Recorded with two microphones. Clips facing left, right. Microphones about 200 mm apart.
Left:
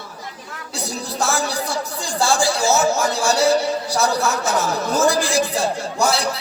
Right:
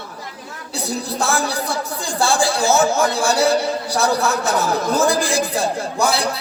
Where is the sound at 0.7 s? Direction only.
55° right (ahead or behind).